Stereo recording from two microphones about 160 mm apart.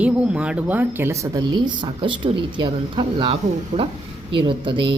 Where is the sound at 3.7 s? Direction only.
45° right (ahead or behind).